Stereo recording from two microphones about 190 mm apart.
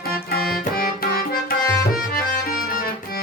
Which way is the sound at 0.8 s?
50° left (ahead or behind).